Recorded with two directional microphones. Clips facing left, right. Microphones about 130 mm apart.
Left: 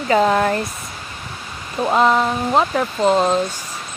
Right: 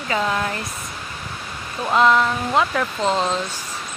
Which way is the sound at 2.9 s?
10° left (ahead or behind).